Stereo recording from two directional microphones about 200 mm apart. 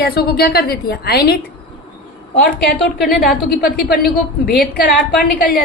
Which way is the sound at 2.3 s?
45° left (ahead or behind).